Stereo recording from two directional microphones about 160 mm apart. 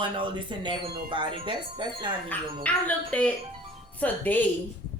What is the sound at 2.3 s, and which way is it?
Speech, 10° left (ahead or behind).